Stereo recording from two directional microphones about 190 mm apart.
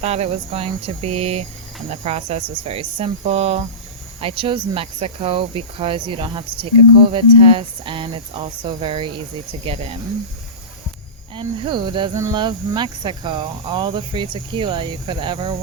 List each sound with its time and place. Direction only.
0.0 s speech: 35° right (ahead or behind)
11.3 s speech: 25° right (ahead or behind)